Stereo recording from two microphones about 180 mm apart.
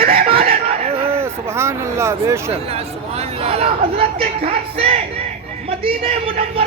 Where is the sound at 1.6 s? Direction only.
15° right (ahead or behind).